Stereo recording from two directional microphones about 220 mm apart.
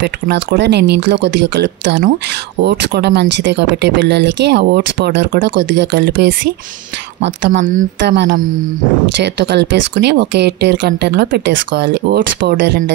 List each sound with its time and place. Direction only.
0.0 s speech: 50° right (ahead or behind)
7.6 s a woman's voice: 35° right (ahead or behind)
8.0 s speech: 50° right (ahead or behind)